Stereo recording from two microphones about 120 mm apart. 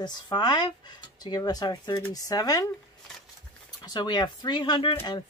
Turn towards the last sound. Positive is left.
turn(degrees=40)  # may be behind; listen again after turning